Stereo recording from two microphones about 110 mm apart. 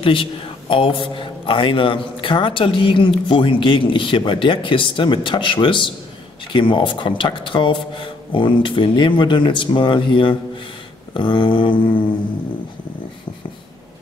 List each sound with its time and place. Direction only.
0.0 s a man's voice: 50° left (ahead or behind)